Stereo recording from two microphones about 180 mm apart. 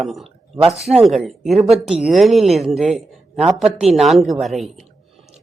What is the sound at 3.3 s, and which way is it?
Speech, 35° right (ahead or behind).